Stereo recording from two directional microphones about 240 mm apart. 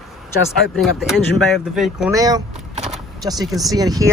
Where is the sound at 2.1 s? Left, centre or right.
Centre.